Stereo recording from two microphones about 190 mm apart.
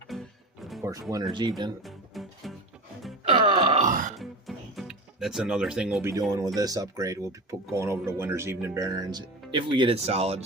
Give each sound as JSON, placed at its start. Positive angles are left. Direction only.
{"t": 0.1, "sound": "music", "side_deg": 0}
{"t": 0.8, "sound": "speech", "side_deg": -15}
{"t": 1.8, "sound": "music", "side_deg": 0}
{"t": 3.2, "sound": "burping", "side_deg": -30}
{"t": 4.2, "sound": "music", "side_deg": 0}
{"t": 6.6, "sound": "speech", "side_deg": -20}